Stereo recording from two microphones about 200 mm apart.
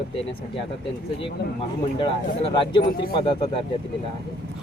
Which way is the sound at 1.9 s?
25° left (ahead or behind).